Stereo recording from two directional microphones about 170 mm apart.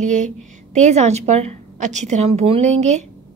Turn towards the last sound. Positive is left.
turn(degrees=-45)  # may be behind; listen again after turning